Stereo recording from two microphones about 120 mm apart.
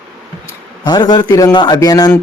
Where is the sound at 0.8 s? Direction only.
35° left (ahead or behind).